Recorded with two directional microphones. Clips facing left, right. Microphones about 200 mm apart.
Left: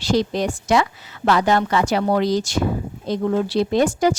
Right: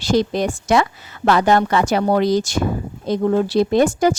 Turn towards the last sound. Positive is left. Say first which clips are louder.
# right 2 dB
turn(degrees=-50)  # may be behind; listen again after turning